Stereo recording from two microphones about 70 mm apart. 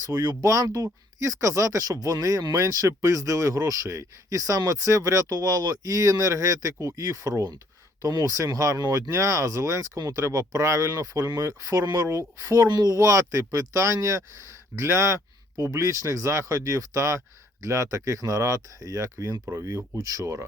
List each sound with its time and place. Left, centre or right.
0.0 s speech: right
13.0 s speech: right